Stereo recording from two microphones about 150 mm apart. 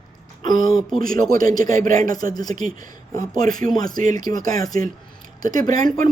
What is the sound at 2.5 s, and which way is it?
Speech, 60° right (ahead or behind).